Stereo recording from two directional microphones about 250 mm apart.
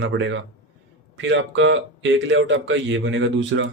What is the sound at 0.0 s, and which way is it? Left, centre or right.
Speech, right.